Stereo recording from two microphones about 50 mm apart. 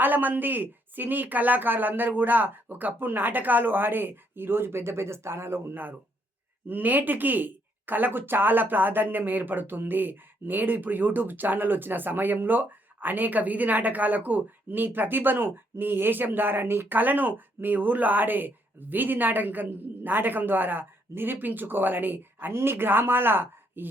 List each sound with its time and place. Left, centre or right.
0.0 s speech: right
6.7 s speech: right